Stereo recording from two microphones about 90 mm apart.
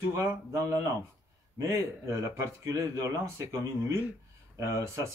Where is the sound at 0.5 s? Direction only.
35° right (ahead or behind).